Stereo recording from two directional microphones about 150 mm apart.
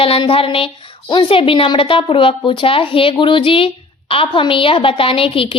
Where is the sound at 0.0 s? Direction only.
40° left (ahead or behind).